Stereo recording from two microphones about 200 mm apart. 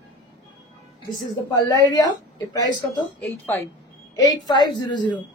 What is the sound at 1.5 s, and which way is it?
Speech, 20° left (ahead or behind).